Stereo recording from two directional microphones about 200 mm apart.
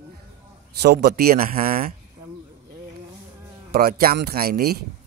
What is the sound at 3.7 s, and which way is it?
Speech, 50° right (ahead or behind).